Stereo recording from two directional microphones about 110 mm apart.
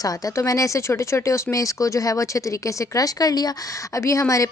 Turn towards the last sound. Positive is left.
turn(degrees=30)  # may be behind; listen again after turning